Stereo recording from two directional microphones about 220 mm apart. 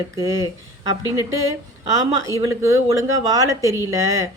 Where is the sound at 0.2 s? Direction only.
15° right (ahead or behind).